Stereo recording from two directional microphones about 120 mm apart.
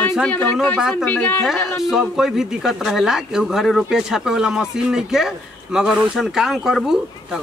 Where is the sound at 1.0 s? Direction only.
15° left (ahead or behind).